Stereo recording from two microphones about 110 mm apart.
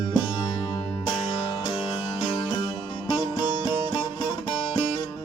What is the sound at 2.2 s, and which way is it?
Music, 50° left (ahead or behind).